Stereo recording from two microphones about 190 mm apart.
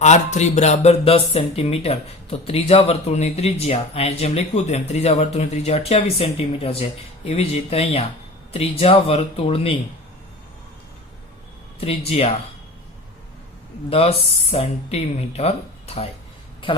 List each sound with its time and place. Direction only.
0.0 s speech: 35° left (ahead or behind)
11.8 s speech: 30° left (ahead or behind)
13.9 s speech: 30° left (ahead or behind)